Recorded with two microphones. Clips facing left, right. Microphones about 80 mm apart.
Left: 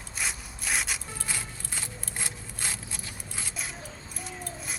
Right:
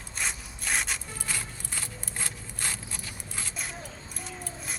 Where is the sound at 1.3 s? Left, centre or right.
Centre.